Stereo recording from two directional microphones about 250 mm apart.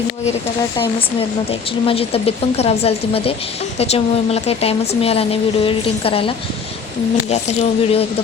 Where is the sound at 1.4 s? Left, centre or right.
Left.